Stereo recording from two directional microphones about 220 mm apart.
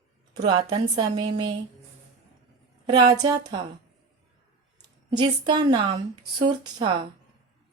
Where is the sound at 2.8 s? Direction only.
20° right (ahead or behind).